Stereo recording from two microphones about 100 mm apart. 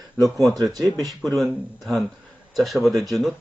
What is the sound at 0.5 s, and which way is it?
Speech, 40° right (ahead or behind).